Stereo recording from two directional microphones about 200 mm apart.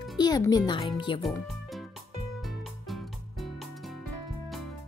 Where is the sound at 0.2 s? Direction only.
20° left (ahead or behind).